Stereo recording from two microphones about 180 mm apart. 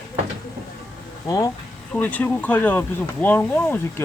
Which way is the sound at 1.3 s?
20° left (ahead or behind).